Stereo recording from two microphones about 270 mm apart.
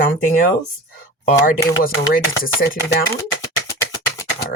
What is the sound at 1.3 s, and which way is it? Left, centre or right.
Speech, left.